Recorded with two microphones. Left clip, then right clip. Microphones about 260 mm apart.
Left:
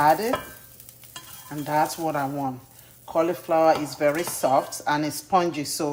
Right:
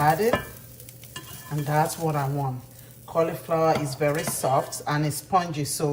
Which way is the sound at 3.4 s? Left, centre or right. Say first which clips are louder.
Left 3 dB; left.